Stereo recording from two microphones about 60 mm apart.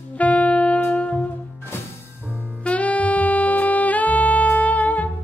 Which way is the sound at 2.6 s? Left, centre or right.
Left.